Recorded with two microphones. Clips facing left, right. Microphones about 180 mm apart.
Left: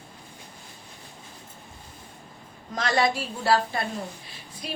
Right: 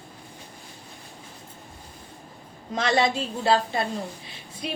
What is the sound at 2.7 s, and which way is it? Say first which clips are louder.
A woman's voice: right 2 dB; 25° right (ahead or behind).